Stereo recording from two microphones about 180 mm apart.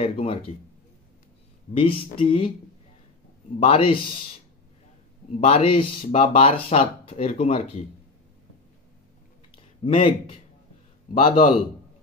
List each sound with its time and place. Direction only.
0.0 s a sound: 35° left (ahead or behind)
1.7 s speech: 30° left (ahead or behind)
3.5 s a man's voice: 30° left (ahead or behind)
5.3 s speech: 35° left (ahead or behind)
9.8 s a man's voice: 30° left (ahead or behind)